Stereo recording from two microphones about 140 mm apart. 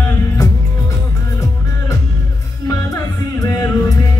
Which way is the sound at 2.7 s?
25° left (ahead or behind).